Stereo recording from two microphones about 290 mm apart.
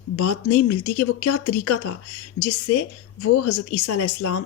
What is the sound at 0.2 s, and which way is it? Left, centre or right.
Speech, left.